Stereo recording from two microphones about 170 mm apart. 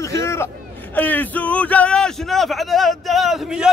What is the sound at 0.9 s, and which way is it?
A man's voice, 10° left (ahead or behind).